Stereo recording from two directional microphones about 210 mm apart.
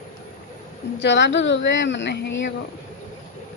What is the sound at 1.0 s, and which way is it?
A woman's voice, 55° left (ahead or behind).